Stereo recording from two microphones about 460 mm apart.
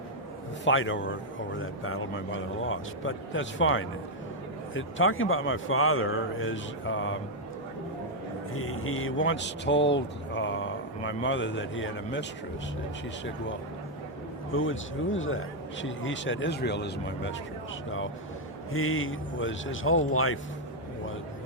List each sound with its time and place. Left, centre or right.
0.6 s speech: left
8.5 s speech: left
14.5 s speech: left
18.7 s speech: left